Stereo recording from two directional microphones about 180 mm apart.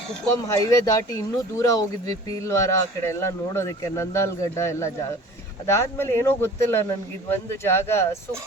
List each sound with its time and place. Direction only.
0.4 s speech: 20° left (ahead or behind)